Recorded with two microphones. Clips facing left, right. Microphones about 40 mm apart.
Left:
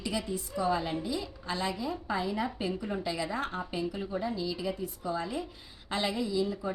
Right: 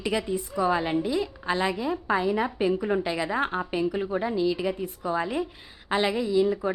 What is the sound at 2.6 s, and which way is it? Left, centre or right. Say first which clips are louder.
A woman's voice: right 8 dB; right.